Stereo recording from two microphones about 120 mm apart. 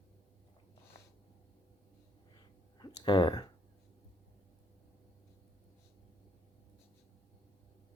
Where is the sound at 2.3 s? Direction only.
35° left (ahead or behind).